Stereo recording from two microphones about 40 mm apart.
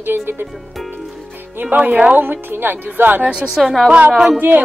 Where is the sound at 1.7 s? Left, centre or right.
Right.